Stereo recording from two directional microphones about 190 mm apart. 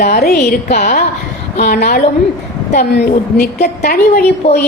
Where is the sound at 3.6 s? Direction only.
55° left (ahead or behind).